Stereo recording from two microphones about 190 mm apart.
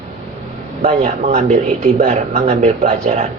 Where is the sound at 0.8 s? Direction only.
40° right (ahead or behind).